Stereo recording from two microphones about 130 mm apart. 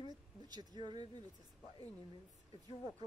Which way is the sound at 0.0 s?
30° right (ahead or behind).